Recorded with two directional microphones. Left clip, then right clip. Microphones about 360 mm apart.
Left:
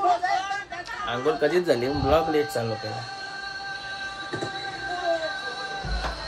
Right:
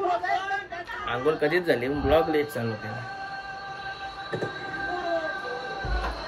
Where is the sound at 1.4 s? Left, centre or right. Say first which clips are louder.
Left 2 dB; centre.